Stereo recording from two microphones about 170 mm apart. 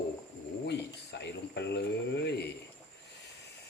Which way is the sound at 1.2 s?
80° left.